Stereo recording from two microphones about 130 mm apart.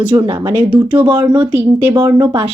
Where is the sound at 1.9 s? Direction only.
30° right (ahead or behind).